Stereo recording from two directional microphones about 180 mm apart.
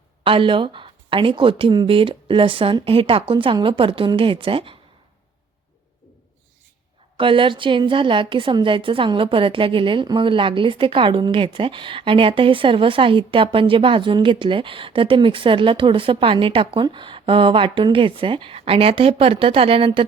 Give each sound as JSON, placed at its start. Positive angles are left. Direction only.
{"t": 0.3, "sound": "a woman's voice", "side_deg": -30}
{"t": 7.2, "sound": "a woman's voice", "side_deg": -30}